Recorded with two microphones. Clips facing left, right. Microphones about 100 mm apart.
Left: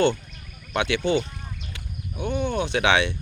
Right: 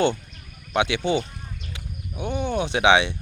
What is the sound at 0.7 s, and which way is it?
Mechanisms, 15° right (ahead or behind).